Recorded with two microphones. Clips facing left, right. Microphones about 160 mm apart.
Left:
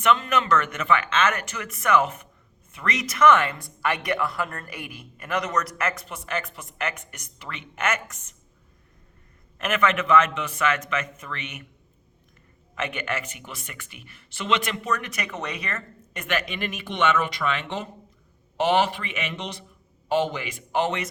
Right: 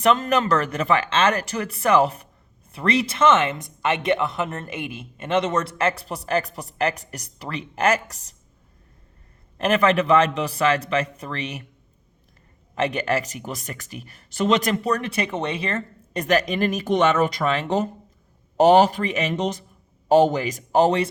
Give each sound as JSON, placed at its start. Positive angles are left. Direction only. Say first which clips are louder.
{"t": 0.0, "sound": "speech", "louder": "right 3 dB", "side_deg": -35}
{"t": 9.6, "sound": "speech", "louder": "right 5 dB", "side_deg": -35}
{"t": 12.7, "sound": "speech", "louder": "right 7 dB", "side_deg": -35}